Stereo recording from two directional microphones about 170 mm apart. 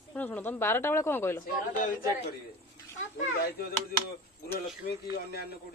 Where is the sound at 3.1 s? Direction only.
65° left (ahead or behind).